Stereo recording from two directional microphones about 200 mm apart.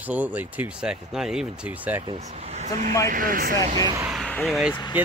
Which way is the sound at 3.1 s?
45° right (ahead or behind).